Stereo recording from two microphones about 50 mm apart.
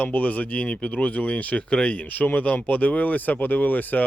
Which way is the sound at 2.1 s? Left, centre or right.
Left.